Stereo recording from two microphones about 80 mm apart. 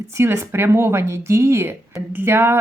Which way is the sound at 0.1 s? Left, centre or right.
Right.